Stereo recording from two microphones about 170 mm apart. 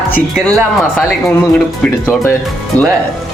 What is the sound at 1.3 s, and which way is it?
Speech, 10° left (ahead or behind).